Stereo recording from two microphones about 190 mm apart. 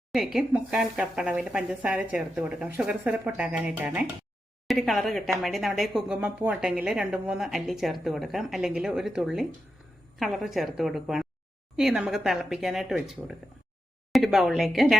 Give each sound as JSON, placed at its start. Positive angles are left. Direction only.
{"t": 0.1, "sound": "speech", "side_deg": 0}